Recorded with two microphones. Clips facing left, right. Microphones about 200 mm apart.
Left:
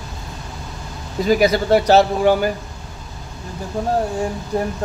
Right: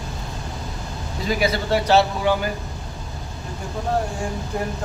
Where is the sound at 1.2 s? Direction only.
45° left (ahead or behind).